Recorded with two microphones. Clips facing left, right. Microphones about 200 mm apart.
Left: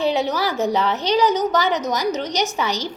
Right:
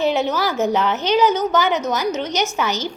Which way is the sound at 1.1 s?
5° right (ahead or behind).